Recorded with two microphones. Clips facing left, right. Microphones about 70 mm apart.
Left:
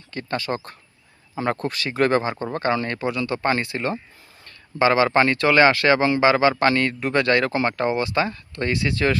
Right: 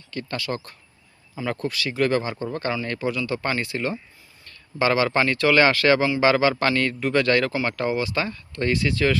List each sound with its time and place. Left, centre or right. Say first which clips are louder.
0.1 s speech: left 3 dB; left